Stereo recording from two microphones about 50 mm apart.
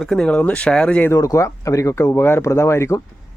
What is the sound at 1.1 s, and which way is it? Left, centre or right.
Speech, left.